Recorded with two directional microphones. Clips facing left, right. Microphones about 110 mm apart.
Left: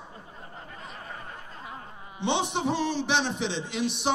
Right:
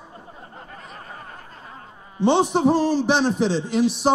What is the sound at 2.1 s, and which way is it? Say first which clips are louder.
A man's voice: right 9 dB; 40° right (ahead or behind).